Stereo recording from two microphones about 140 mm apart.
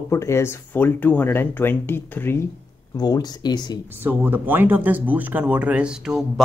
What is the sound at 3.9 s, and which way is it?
Speech, 15° right (ahead or behind).